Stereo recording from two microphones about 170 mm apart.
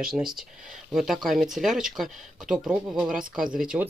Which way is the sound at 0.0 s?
5° right (ahead or behind).